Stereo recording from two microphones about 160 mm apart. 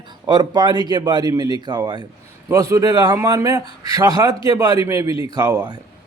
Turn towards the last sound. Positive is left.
turn(degrees=-25)  # may be behind; listen again after turning